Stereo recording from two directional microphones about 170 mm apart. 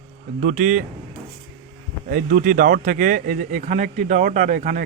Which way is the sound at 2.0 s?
55° right (ahead or behind).